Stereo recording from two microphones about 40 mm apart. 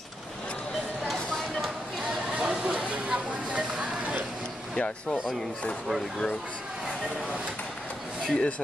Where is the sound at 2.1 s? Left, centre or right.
Centre.